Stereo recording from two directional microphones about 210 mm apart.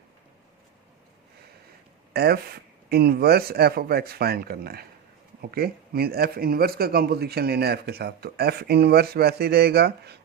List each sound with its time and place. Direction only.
2.1 s speech: 50° right (ahead or behind)